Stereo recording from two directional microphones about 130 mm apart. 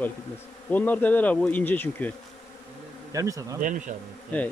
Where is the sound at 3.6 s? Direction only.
80° right.